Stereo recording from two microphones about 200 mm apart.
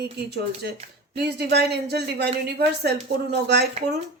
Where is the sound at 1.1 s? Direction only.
55° right (ahead or behind).